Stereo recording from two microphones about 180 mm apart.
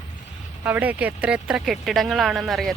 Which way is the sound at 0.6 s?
10° right (ahead or behind).